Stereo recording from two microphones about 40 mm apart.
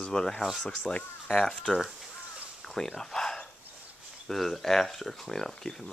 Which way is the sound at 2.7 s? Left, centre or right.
Centre.